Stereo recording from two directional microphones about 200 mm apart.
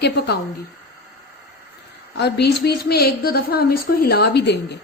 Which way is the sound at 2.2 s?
55° left (ahead or behind).